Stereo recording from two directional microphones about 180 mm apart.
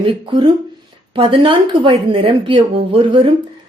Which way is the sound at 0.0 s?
25° right (ahead or behind).